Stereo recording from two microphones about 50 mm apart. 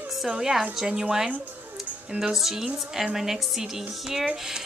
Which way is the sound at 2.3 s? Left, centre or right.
Centre.